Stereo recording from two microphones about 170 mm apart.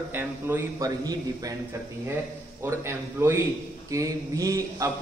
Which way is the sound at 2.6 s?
15° right (ahead or behind).